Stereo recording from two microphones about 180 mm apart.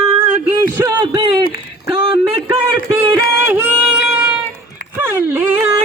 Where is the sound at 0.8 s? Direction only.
25° right (ahead or behind).